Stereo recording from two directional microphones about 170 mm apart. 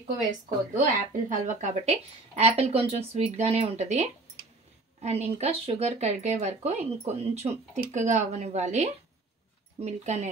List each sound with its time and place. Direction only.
0.7 s speech: 50° right (ahead or behind)